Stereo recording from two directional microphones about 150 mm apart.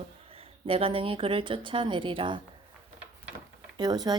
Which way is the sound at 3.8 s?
25° right (ahead or behind).